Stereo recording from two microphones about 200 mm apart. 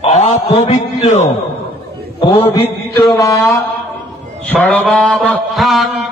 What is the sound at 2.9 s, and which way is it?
Mantra, 15° left (ahead or behind).